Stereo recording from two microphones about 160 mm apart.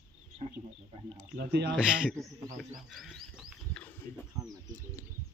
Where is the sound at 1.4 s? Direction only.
85° right.